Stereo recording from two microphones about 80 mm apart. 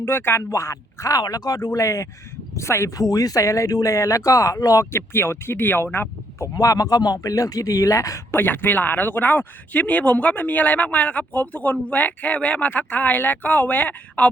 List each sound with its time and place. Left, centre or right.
0.0 s speech: left
1.2 s speech: left
1.8 s speech: left
4.9 s speech: left
6.6 s speech: left
8.4 s speech: left